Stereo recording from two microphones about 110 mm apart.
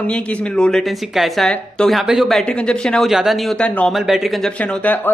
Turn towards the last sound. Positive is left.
turn(degrees=15)  # may be behind; listen again after turning